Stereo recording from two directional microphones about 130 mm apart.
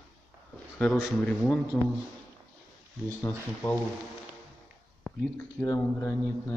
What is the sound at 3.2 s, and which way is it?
Speech, 15° left (ahead or behind).